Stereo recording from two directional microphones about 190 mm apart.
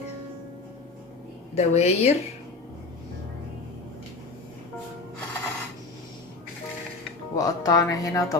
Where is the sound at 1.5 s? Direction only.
35° left (ahead or behind).